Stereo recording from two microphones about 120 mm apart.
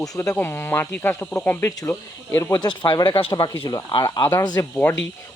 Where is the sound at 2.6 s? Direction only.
40° left (ahead or behind).